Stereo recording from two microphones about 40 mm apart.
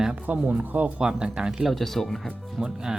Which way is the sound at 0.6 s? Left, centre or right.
Right.